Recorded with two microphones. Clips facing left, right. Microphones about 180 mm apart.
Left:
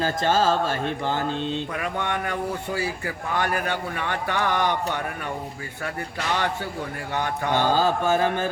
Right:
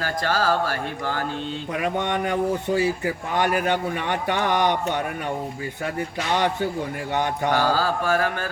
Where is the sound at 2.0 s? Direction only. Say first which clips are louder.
Right 4 dB; 20° right (ahead or behind).